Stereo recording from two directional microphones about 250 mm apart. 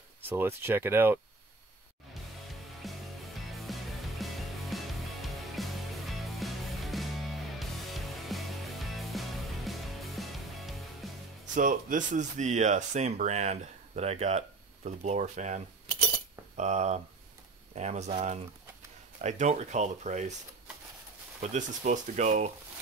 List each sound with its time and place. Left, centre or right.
0.3 s speech: centre
2.8 s music: centre
11.5 s speech: right
21.4 s speech: right